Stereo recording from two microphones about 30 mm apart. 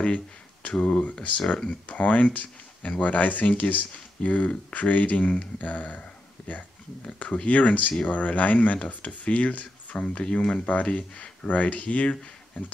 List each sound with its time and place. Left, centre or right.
0.0 s a sound: left
0.7 s speech: left
1.0 s speech: left
7.1 s speech: left
10.0 s speech: left
10.5 s speech: left